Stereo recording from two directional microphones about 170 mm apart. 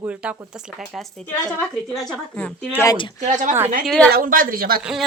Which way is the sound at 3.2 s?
50° right (ahead or behind).